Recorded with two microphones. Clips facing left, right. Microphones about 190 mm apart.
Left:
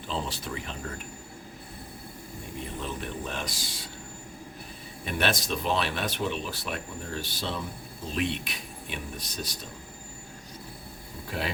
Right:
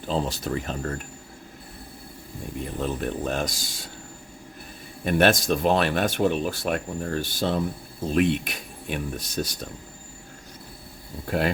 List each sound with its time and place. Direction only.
0.1 s speech: 45° right (ahead or behind)
2.8 s speech: 45° right (ahead or behind)
5.0 s speech: 50° right (ahead or behind)
11.3 s speech: 50° right (ahead or behind)